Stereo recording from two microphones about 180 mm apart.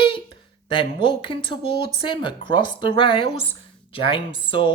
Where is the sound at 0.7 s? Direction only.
30° left (ahead or behind).